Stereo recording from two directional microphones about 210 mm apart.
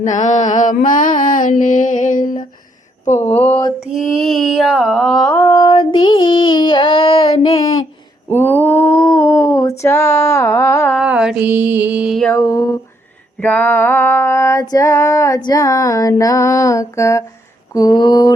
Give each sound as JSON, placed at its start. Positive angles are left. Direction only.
{"t": 0.0, "sound": "mantra", "side_deg": 35}
{"t": 3.2, "sound": "female singing", "side_deg": 10}
{"t": 3.9, "sound": "a sound", "side_deg": 0}
{"t": 10.9, "sound": "mantra", "side_deg": -5}
{"t": 12.4, "sound": "female singing", "side_deg": 15}
{"t": 17.7, "sound": "a sound", "side_deg": 20}